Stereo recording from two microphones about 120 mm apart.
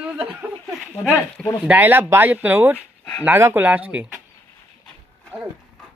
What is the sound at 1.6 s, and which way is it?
Speech, 15° right (ahead or behind).